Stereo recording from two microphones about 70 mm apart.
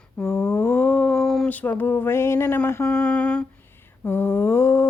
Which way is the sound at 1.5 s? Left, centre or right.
Left.